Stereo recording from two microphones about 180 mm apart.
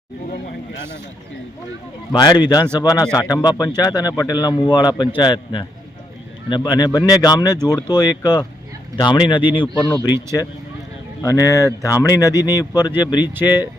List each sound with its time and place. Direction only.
2.1 s a man's voice: 25° left (ahead or behind)
11.2 s a man's voice: 20° left (ahead or behind)